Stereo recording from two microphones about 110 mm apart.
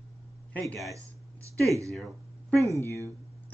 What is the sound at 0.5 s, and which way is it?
Speech, 15° left (ahead or behind).